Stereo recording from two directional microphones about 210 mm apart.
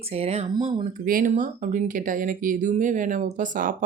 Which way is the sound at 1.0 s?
40° right (ahead or behind).